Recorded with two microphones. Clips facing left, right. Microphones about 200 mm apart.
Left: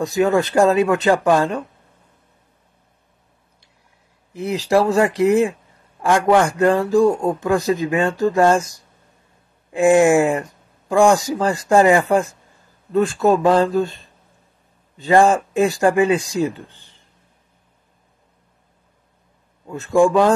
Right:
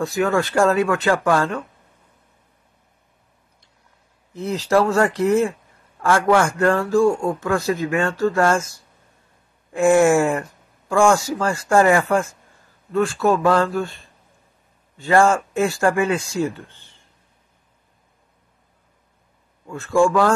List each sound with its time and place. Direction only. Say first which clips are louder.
0.0 s a man's voice: left 3 dB; 20° left (ahead or behind)
4.3 s a man's voice: left 1 dB; 15° left (ahead or behind)
19.6 s speech: left 2 dB; 20° left (ahead or behind)